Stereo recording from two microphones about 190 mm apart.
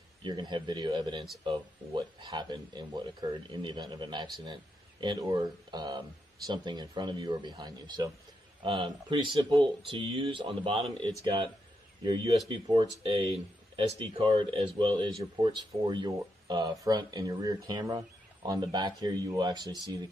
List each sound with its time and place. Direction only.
0.2 s speech: 25° right (ahead or behind)